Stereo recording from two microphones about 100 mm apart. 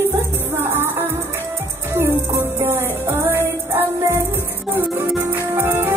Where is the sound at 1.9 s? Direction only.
25° right (ahead or behind).